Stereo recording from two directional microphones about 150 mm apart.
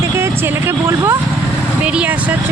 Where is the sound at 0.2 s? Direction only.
15° right (ahead or behind).